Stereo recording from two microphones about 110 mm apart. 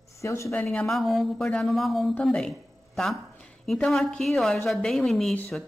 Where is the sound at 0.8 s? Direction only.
Centre (ahead or behind).